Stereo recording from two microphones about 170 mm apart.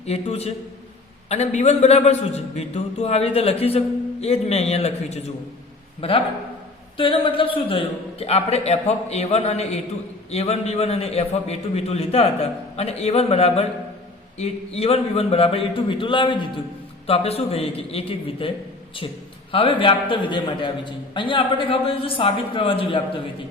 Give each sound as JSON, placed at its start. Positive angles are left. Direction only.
{"t": 0.0, "sound": "a man's voice", "side_deg": 40}